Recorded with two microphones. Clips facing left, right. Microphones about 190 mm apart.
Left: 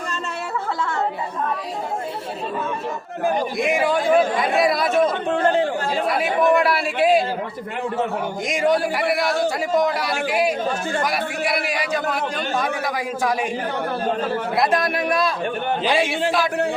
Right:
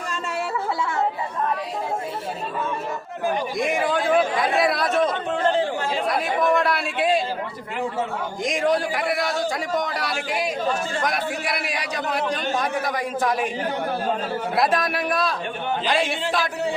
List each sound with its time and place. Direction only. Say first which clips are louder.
3.6 s a sound: left 2 dB; 5° left (ahead or behind)
4.5 s chatter: left 3 dB; centre (ahead or behind)
5.3 s chatter: left 3 dB; 50° left (ahead or behind)
6.1 s speech: left 3 dB; 5° left (ahead or behind)
8.4 s speech: left 2 dB; centre (ahead or behind)
14.5 s speech: left 1 dB; centre (ahead or behind)